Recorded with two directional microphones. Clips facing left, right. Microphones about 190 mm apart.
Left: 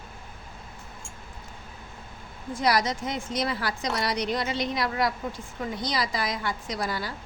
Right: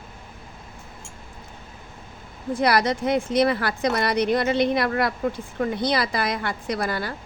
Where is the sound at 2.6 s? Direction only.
60° right (ahead or behind).